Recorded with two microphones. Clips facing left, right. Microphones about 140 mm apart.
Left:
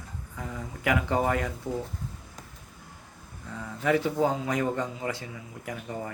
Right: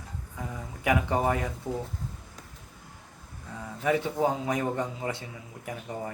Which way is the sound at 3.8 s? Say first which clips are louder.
Left 1 dB; 20° right (ahead or behind).